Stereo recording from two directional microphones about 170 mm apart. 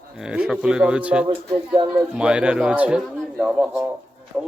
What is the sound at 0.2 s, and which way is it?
Speech, 5° right (ahead or behind).